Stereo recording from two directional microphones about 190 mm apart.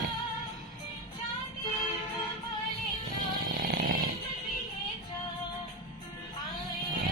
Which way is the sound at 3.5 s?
50° right (ahead or behind).